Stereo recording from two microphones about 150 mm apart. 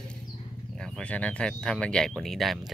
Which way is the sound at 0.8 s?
10° left (ahead or behind).